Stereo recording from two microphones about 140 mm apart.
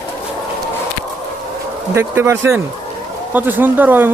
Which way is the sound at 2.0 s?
15° right (ahead or behind).